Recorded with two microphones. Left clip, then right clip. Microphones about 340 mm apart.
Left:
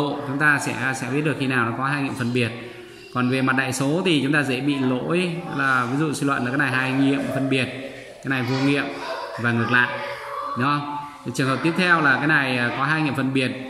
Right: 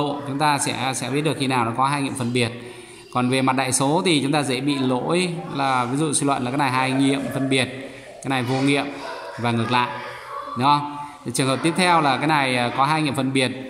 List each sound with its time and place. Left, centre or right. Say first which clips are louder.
0.0 s speech: left 1 dB; centre
11.3 s speech: right 1 dB; centre